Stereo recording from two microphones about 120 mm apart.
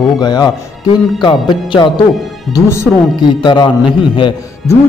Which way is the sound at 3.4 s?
40° left (ahead or behind).